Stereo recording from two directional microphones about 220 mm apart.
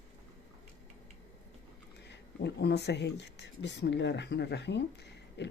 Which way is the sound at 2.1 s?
50° left (ahead or behind).